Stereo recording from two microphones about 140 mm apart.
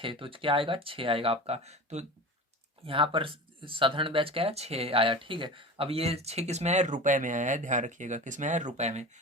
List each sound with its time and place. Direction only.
0.0 s speech: 40° right (ahead or behind)
2.8 s speech: 40° right (ahead or behind); by 9.0 s 55° right (ahead or behind)